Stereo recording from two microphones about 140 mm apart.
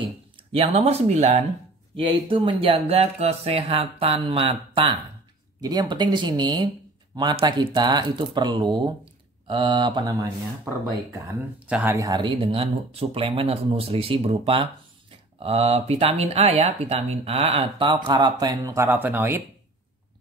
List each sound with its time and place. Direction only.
0.5 s speech: 45° right (ahead or behind)
2.0 s speech: 40° right (ahead or behind)
5.6 s speech: 30° right (ahead or behind)
11.6 s speech: 15° right (ahead or behind)